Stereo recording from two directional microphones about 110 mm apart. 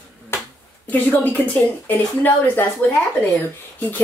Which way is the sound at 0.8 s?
15° left (ahead or behind).